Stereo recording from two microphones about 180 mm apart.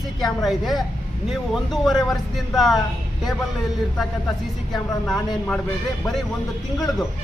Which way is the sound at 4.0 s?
Centre (ahead or behind).